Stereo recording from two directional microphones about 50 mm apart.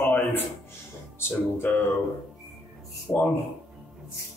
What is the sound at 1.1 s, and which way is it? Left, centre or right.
Speech, left.